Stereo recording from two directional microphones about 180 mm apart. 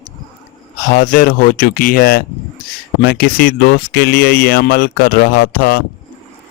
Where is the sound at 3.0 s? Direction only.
60° left (ahead or behind).